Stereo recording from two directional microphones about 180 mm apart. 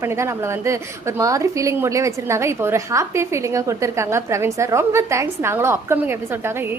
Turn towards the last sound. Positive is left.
turn(degrees=-15)  # may be behind; listen again after turning